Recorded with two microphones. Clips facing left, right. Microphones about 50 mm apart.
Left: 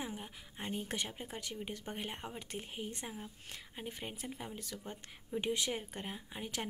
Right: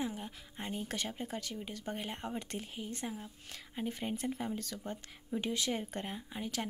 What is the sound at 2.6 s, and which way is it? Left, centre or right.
Speech, left.